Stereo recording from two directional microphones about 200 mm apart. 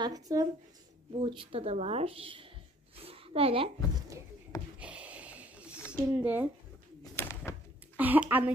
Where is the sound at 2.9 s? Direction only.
30° right (ahead or behind).